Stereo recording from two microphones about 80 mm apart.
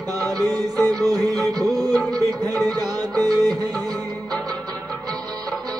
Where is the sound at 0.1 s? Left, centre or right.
Right.